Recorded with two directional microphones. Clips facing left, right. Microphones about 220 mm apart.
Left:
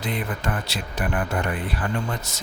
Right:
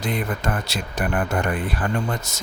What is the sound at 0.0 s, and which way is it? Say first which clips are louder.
Speech: right 3 dB; 45° right (ahead or behind).